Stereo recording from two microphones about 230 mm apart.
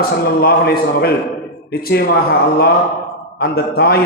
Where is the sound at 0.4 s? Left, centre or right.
Left.